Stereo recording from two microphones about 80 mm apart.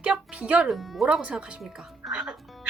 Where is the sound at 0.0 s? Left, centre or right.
Centre.